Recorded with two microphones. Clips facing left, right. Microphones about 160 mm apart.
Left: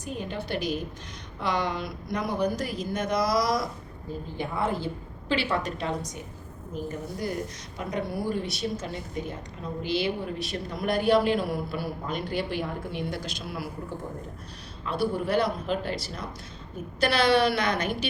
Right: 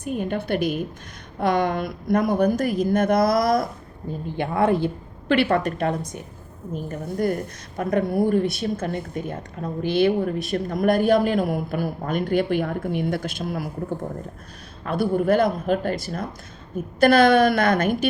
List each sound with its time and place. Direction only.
0.0 s a woman's voice: 55° right (ahead or behind)
4.4 s a woman's voice: 65° right (ahead or behind); by 13.7 s 50° right (ahead or behind)
14.8 s speech: 50° right (ahead or behind)